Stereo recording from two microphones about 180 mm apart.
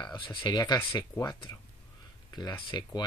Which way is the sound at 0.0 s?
25° left (ahead or behind).